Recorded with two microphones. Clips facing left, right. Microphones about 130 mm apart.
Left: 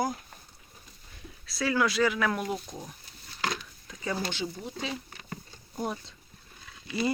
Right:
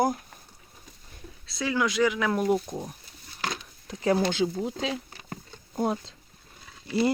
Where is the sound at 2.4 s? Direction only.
40° right (ahead or behind).